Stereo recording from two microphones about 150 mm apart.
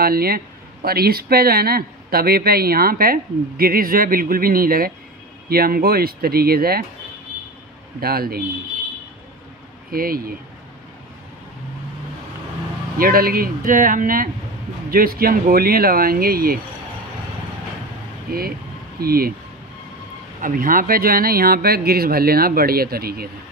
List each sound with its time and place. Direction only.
0.0 s speech: 90° right; by 4.9 s 75° right (ahead or behind)
5.5 s speech: 90° right
8.0 s speech: 90° right
9.8 s speech: 75° right (ahead or behind)
13.0 s speech: 80° right
18.3 s speech: 75° right (ahead or behind)
18.9 s speech: 90° right
20.3 s speech: 65° right (ahead or behind); by 23.2 s 90° right